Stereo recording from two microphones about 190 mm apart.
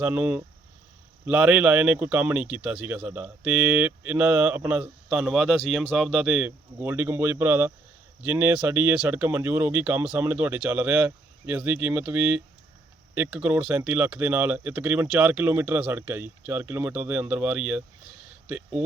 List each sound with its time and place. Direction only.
0.0 s speech: 10° right (ahead or behind)